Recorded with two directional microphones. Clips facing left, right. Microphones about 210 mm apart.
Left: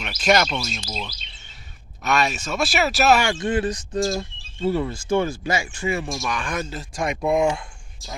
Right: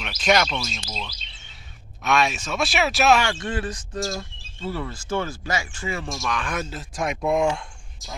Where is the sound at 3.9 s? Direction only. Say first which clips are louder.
Left 5 dB; 30° left (ahead or behind).